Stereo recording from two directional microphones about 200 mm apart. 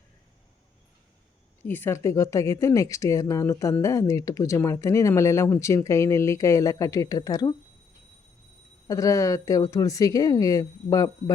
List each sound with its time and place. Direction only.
1.6 s speech: 10° left (ahead or behind)
8.9 s speech: 15° left (ahead or behind)